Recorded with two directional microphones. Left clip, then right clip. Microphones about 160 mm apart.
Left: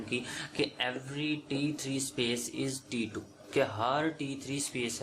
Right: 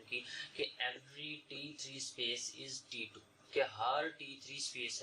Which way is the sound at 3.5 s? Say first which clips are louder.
Left 6 dB; 40° left (ahead or behind).